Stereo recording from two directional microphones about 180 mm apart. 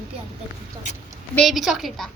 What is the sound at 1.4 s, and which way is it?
Speech, centre (ahead or behind).